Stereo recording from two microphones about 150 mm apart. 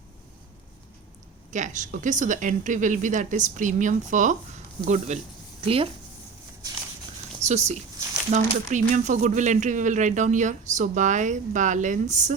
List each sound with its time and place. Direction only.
1.5 s speech: 55° right (ahead or behind)
5.6 s speech: 40° right (ahead or behind)
7.4 s a sound: 20° right (ahead or behind)
8.3 s speech: 50° right (ahead or behind)